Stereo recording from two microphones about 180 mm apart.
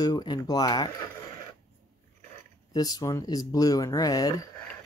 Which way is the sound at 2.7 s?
20° left (ahead or behind).